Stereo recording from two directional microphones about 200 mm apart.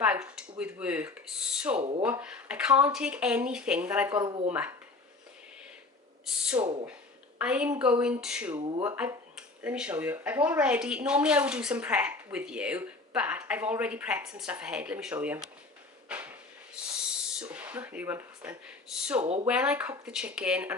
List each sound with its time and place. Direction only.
0.0 s a sound: 5° right (ahead or behind)
2.0 s speech: 10° right (ahead or behind)
4.1 s speech: 20° right (ahead or behind)
6.4 s speech: 5° right (ahead or behind)
8.5 s speech: 25° right (ahead or behind)
8.8 s speech: 15° right (ahead or behind)
16.0 s drawer open or close: 5° right (ahead or behind)
17.4 s speech: 10° right (ahead or behind)
19.2 s speech: 30° right (ahead or behind)
19.5 s speech: 5° right (ahead or behind)